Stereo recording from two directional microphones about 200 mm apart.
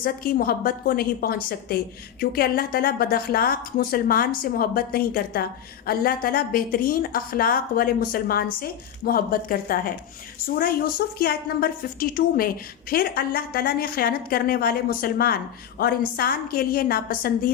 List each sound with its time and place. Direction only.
0.0 s a woman's voice: 45° left (ahead or behind)